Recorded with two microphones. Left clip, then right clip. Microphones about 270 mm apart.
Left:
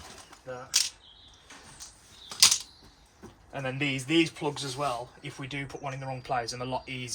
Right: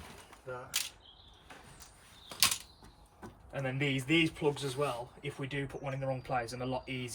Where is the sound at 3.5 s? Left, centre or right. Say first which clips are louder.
Left 4 dB; centre.